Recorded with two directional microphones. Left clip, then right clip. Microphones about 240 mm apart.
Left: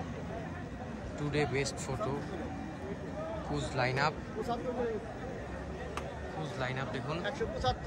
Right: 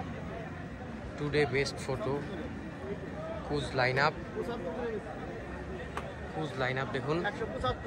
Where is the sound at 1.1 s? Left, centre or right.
Centre.